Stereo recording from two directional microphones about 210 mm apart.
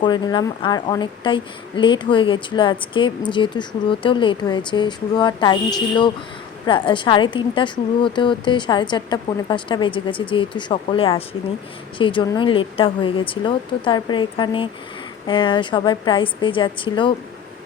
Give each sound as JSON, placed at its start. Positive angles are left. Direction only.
{"t": 0.0, "sound": "a woman's voice", "side_deg": 20}